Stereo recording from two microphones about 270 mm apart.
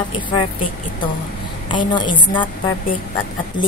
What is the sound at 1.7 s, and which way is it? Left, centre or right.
Speech, centre.